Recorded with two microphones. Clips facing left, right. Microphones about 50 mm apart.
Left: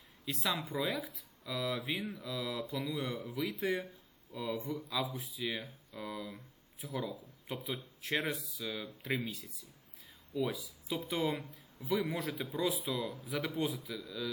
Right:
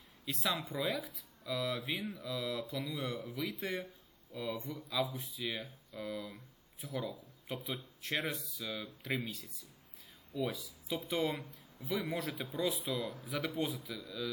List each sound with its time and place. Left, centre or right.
0.3 s speech: centre